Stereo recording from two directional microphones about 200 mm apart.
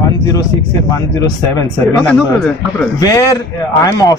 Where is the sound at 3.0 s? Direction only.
20° left (ahead or behind).